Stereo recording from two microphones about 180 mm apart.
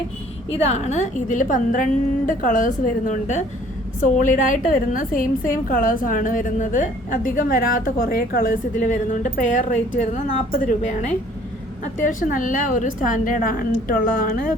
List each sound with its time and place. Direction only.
0.5 s a woman's voice: 35° left (ahead or behind)